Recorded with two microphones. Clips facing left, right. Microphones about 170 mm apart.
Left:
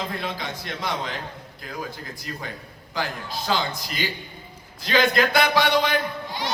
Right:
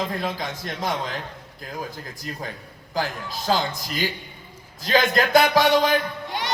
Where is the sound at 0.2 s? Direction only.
45° right (ahead or behind).